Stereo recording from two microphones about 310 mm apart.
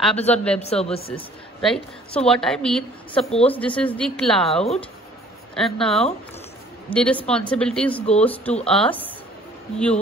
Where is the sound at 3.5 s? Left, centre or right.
Centre.